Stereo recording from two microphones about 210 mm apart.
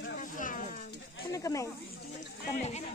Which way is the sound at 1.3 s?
15° left (ahead or behind).